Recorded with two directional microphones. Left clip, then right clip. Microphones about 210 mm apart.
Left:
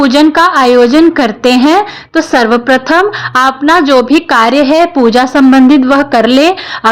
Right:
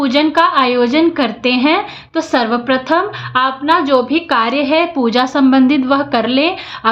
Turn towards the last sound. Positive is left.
turn(degrees=40)  # may be behind; listen again after turning